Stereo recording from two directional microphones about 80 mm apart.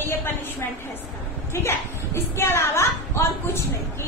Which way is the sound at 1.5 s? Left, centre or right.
Left.